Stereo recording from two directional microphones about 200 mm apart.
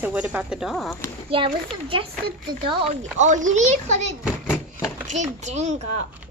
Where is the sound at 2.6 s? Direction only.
35° right (ahead or behind).